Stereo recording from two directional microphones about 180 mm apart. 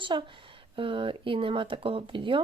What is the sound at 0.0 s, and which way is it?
Speech, 25° right (ahead or behind).